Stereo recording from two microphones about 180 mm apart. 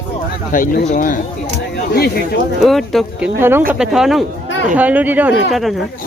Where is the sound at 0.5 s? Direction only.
50° left (ahead or behind).